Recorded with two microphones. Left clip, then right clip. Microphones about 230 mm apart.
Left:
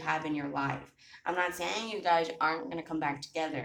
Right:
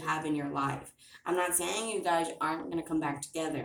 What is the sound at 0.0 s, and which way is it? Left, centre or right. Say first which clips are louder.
Speech: even; left.